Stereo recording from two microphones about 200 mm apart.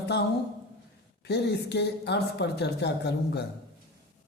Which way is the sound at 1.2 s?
55° left (ahead or behind).